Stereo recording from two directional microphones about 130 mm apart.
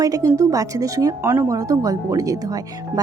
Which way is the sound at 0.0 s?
25° right (ahead or behind).